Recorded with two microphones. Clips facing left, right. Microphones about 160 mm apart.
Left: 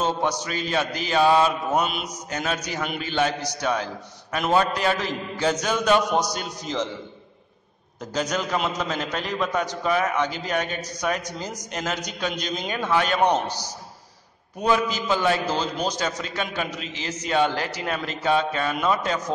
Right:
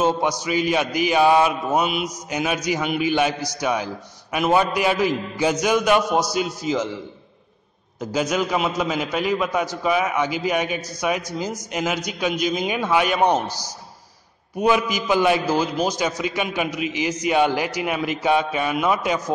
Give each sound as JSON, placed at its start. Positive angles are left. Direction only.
{"t": 0.0, "sound": "mantra", "side_deg": -10}
{"t": 8.0, "sound": "mantra", "side_deg": -10}